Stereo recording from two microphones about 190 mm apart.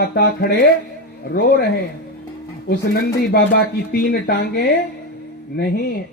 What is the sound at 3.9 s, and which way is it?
Speech, 50° left (ahead or behind).